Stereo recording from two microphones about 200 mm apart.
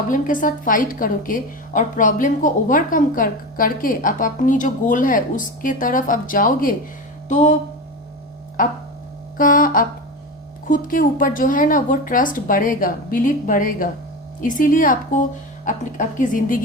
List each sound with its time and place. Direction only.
0.1 s a woman's voice: 40° left (ahead or behind)
7.3 s music: 35° left (ahead or behind)
9.4 s a woman's voice: 40° left (ahead or behind)